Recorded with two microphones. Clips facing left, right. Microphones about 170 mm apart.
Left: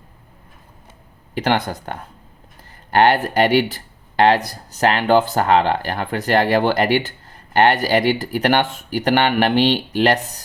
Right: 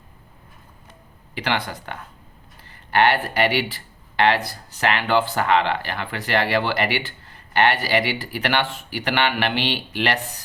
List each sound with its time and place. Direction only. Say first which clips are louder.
1.4 s speech: left 6 dB; 45° left (ahead or behind)